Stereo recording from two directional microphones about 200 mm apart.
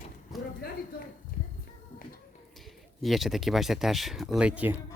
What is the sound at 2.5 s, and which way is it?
Speech, centre (ahead or behind).